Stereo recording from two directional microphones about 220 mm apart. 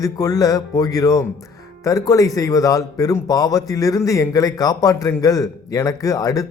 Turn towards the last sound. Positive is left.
turn(degrees=15)  # may be behind; listen again after turning